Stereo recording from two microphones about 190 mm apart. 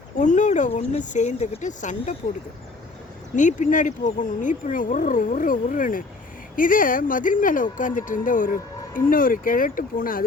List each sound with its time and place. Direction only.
0.2 s speech: 40° left (ahead or behind)
3.3 s speech: 40° left (ahead or behind)